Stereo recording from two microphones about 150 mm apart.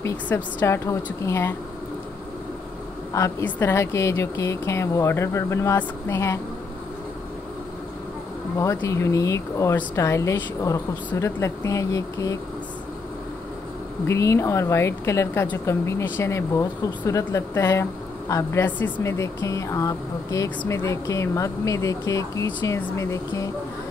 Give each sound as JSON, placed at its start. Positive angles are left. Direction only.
{"t": 0.0, "sound": "speech", "side_deg": 15}
{"t": 3.1, "sound": "speech", "side_deg": 20}
{"t": 8.5, "sound": "speech", "side_deg": 20}
{"t": 14.0, "sound": "speech", "side_deg": 20}